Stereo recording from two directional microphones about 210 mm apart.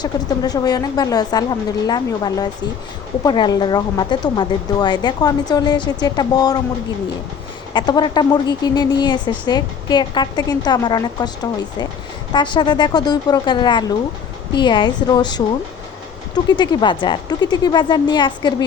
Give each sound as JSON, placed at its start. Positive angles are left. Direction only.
{"t": 0.0, "sound": "speech", "side_deg": 20}
{"t": 7.7, "sound": "speech", "side_deg": 20}
{"t": 12.3, "sound": "speech", "side_deg": 20}